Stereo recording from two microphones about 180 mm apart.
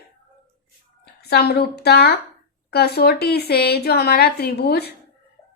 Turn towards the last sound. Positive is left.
turn(degrees=65)  # may be behind; listen again after turning